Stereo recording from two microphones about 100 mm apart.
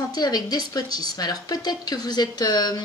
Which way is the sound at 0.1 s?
40° left (ahead or behind).